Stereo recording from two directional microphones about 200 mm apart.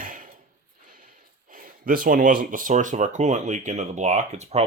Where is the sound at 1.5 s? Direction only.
45° right (ahead or behind).